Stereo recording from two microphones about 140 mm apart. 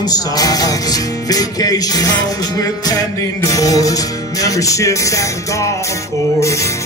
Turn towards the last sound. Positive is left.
turn(degrees=20)  # may be behind; listen again after turning